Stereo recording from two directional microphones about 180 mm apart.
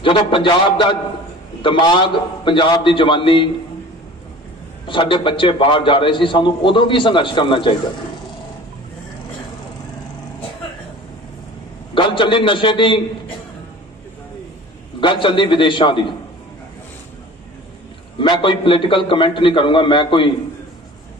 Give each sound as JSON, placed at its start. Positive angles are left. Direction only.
{"t": 0.0, "sound": "a man's voice", "side_deg": 25}
{"t": 4.8, "sound": "a man's voice", "side_deg": 30}
{"t": 11.9, "sound": "a man's voice", "side_deg": 30}
{"t": 15.0, "sound": "a man's voice", "side_deg": 25}
{"t": 18.2, "sound": "a man's voice", "side_deg": 25}